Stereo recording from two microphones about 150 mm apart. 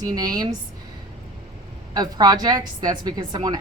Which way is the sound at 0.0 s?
25° right (ahead or behind).